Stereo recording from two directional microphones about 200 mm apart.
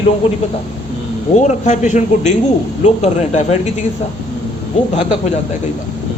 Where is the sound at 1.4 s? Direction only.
35° left (ahead or behind).